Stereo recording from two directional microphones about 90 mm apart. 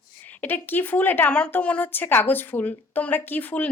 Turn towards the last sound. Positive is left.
turn(degrees=20)  # may be behind; listen again after turning